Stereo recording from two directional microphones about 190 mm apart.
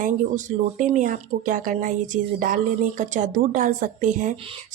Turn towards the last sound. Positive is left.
turn(degrees=-45)  # may be behind; listen again after turning